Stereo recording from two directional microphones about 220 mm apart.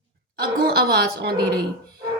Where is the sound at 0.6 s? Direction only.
45° right (ahead or behind).